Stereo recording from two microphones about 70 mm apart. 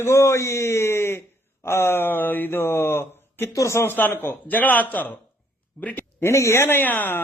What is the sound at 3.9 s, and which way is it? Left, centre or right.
Speech, left.